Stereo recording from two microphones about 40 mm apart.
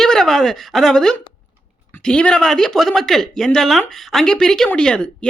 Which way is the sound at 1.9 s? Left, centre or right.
Left.